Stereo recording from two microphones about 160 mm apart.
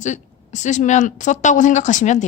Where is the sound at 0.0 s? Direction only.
50° left (ahead or behind).